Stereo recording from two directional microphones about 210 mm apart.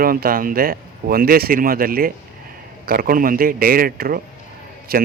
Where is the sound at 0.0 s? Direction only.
45° right (ahead or behind).